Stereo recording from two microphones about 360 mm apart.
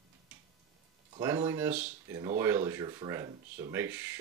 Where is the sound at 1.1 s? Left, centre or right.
Centre.